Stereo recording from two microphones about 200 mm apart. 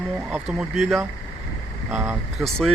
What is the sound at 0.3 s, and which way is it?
Speech, 5° right (ahead or behind).